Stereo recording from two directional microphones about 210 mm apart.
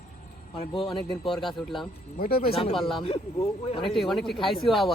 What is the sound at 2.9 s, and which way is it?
Speech, 30° left (ahead or behind).